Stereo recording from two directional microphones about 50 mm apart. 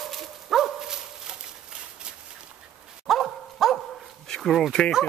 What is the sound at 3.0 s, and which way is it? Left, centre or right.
Dog, centre.